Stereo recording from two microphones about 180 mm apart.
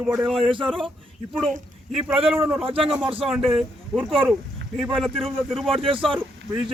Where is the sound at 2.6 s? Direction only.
30° right (ahead or behind).